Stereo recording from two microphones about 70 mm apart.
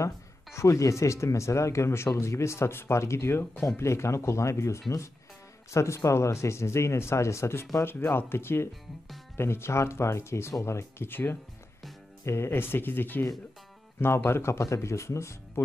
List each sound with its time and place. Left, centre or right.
0.6 s speech: left